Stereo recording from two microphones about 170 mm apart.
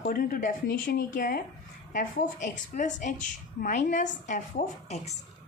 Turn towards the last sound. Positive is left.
turn(degrees=40)  # may be behind; listen again after turning